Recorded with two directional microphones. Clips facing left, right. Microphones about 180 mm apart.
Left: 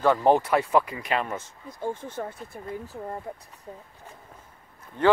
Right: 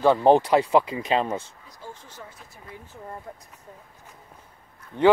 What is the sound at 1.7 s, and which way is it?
Speech, 55° left (ahead or behind).